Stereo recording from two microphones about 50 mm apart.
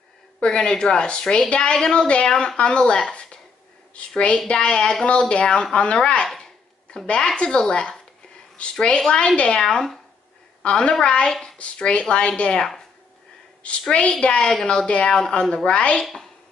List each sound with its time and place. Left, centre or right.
0.4 s a woman's voice: centre
4.5 s a woman's voice: centre
6.2 s a sound: centre
6.9 s a woman's voice: centre